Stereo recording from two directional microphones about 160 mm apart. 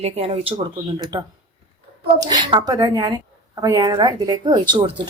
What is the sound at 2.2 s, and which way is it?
A woman's voice, 25° right (ahead or behind).